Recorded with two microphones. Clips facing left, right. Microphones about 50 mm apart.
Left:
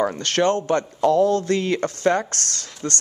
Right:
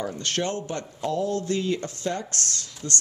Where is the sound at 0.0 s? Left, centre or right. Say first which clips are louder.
Left 8 dB; left.